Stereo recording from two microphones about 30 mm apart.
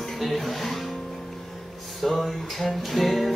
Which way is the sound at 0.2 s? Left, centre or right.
Centre.